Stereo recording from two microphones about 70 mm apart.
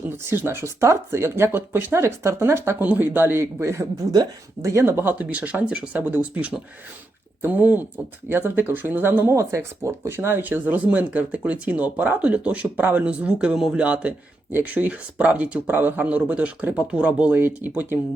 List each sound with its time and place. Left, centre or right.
0.3 s speech: right
2.8 s speech: right
3.6 s speech: right
5.1 s speech: right
9.3 s speech: right